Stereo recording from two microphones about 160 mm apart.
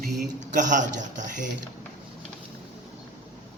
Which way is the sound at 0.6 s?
50° right (ahead or behind).